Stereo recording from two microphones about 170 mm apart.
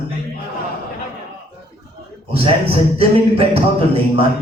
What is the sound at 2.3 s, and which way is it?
A man's voice, 35° right (ahead or behind).